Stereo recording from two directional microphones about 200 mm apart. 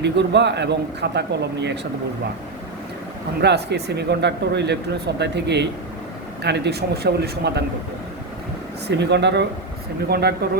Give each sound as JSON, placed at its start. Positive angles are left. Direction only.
{"t": 0.0, "sound": "speech", "side_deg": -60}
{"t": 3.4, "sound": "speech", "side_deg": -55}
{"t": 8.9, "sound": "speech", "side_deg": -60}